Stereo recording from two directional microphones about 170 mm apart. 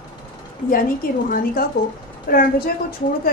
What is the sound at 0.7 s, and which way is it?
A woman's voice, 55° left (ahead or behind).